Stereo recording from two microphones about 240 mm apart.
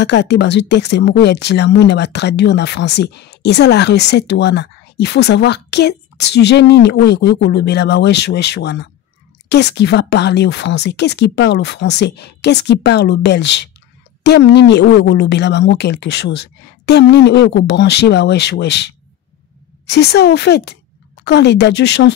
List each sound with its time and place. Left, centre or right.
0.0 s speech: left